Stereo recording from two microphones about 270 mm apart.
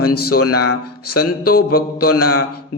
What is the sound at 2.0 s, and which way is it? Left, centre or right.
Speech, left.